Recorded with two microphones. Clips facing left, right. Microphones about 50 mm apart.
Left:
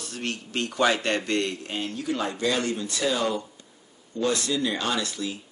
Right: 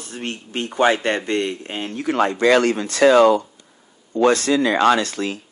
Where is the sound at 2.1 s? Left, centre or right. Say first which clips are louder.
Right 12 dB; right.